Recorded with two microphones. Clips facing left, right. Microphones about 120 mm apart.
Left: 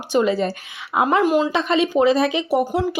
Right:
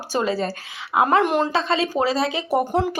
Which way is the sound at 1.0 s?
20° right (ahead or behind).